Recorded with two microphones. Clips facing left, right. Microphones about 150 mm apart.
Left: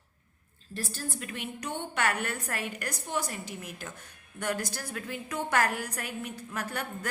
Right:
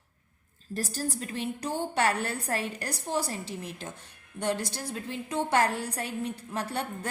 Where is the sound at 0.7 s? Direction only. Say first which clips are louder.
Right 5 dB; 40° right (ahead or behind).